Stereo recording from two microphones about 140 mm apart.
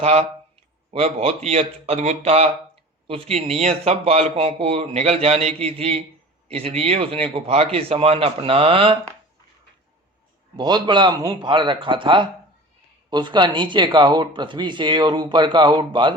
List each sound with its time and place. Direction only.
0.0 s a man's voice: 45° right (ahead or behind)
10.6 s speech: 30° right (ahead or behind)